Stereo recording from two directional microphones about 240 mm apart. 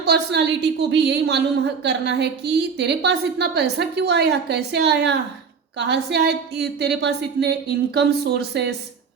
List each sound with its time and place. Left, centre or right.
0.0 s a woman's voice: right